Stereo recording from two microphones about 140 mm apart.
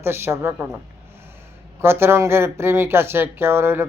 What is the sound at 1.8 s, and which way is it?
Speech, 15° right (ahead or behind).